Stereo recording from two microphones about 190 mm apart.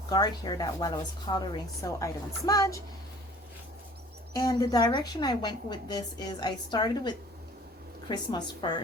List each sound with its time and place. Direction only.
0.1 s a woman's voice: 20° left (ahead or behind)
4.4 s a woman's voice: 20° left (ahead or behind)